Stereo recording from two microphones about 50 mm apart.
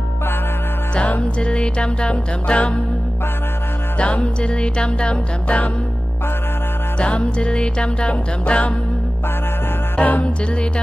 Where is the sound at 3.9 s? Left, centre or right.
Left.